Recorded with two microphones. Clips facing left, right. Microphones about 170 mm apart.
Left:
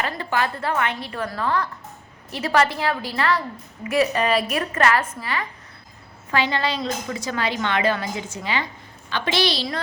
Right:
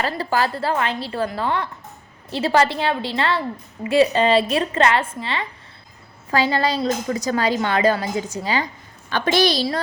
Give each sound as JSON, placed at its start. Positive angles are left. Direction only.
{"t": 0.0, "sound": "a woman's voice", "side_deg": -35}
{"t": 6.3, "sound": "a woman's voice", "side_deg": -35}